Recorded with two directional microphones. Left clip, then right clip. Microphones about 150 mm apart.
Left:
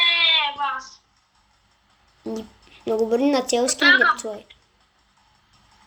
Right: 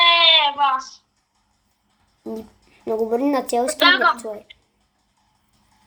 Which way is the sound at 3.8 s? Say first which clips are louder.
Right 1 dB; 15° right (ahead or behind).